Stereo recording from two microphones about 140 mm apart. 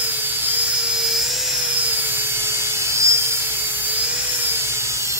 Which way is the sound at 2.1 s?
15° right (ahead or behind).